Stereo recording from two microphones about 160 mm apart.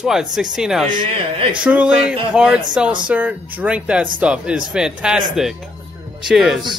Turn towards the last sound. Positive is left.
turn(degrees=0)  # may be behind; listen again after turning